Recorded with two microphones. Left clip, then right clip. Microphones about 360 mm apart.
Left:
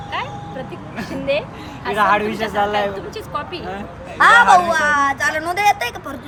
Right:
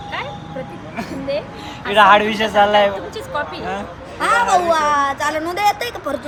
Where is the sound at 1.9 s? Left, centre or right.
Right.